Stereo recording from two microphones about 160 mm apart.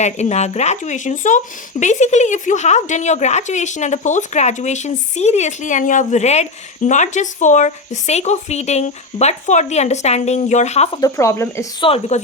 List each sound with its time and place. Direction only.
0.0 s a woman's voice: 45° left (ahead or behind)
10.9 s speech: 20° left (ahead or behind)
11.8 s a woman's voice: 40° left (ahead or behind)